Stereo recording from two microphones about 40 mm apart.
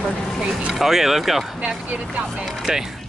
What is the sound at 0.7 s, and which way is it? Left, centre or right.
Speech, centre.